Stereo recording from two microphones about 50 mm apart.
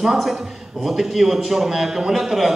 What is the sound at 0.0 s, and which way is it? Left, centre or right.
A man's voice, centre.